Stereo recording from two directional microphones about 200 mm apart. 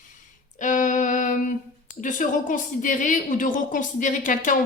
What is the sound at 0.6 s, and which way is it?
A woman's voice, 40° left (ahead or behind).